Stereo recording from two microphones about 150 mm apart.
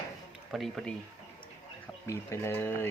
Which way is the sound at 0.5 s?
Centre (ahead or behind).